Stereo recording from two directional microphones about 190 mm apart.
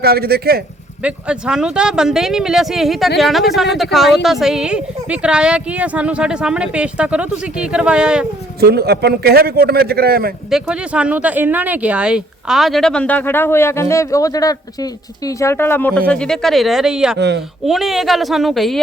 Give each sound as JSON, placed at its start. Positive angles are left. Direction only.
{"t": 0.0, "sound": "a man's voice", "side_deg": -55}
{"t": 1.0, "sound": "speech", "side_deg": -5}
{"t": 8.6, "sound": "a man's voice", "side_deg": -55}
{"t": 10.5, "sound": "speech", "side_deg": -5}
{"t": 17.2, "sound": "a man's voice", "side_deg": -60}
{"t": 17.7, "sound": "speech", "side_deg": 0}